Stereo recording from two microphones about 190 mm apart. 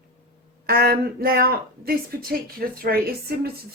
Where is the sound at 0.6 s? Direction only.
50° right (ahead or behind).